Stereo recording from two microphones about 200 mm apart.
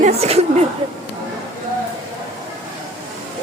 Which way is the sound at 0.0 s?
30° right (ahead or behind).